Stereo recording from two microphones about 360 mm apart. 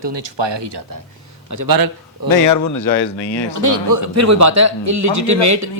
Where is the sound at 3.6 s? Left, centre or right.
Right.